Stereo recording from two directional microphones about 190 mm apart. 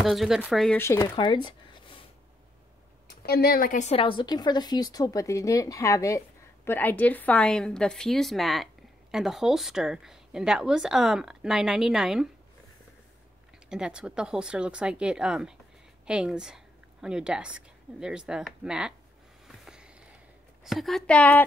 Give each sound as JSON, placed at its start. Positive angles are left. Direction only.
{"t": 0.0, "sound": "a woman's voice", "side_deg": 0}
{"t": 0.7, "sound": "speech", "side_deg": 15}
{"t": 3.1, "sound": "a woman's voice", "side_deg": 55}
{"t": 13.7, "sound": "a woman's voice", "side_deg": -5}
{"t": 19.4, "sound": "a sound", "side_deg": -5}
{"t": 20.6, "sound": "a woman's voice", "side_deg": 0}